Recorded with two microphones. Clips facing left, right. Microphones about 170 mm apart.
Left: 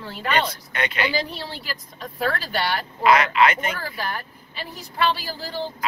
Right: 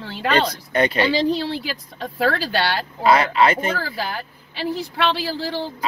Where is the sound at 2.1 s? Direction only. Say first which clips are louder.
Right 4 dB; 90° right.